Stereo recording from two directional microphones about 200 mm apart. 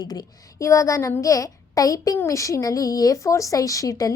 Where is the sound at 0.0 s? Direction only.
20° left (ahead or behind).